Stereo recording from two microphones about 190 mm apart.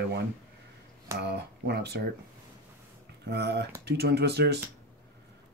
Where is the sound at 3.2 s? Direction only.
60° right (ahead or behind).